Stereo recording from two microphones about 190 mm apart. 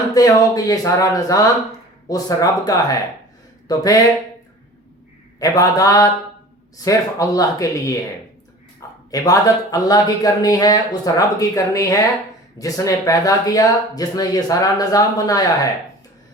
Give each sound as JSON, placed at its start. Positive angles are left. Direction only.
{"t": 0.1, "sound": "speech", "side_deg": 20}
{"t": 5.4, "sound": "speech", "side_deg": 20}
{"t": 9.0, "sound": "speech", "side_deg": 20}